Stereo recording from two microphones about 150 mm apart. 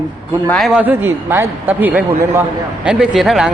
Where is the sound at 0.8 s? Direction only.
15° right (ahead or behind).